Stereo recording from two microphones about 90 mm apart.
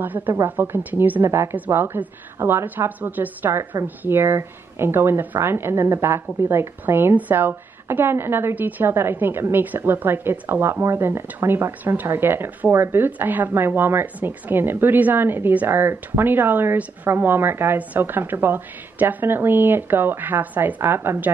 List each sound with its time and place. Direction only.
0.0 s a woman's voice: 20° right (ahead or behind)